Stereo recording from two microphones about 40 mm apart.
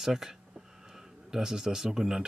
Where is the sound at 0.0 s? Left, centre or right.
Centre.